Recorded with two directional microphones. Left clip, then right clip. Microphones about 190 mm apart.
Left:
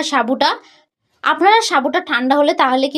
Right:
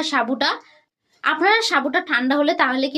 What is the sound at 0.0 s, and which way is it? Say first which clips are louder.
A woman's voice: left 5 dB; 35° left (ahead or behind).